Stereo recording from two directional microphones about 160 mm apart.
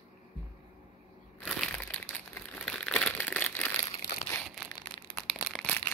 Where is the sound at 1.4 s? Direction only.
5° left (ahead or behind).